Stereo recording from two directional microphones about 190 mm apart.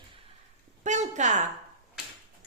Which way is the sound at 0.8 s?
40° right (ahead or behind).